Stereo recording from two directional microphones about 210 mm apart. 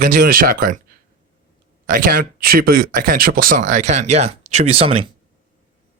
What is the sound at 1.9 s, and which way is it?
Speech, 45° right (ahead or behind).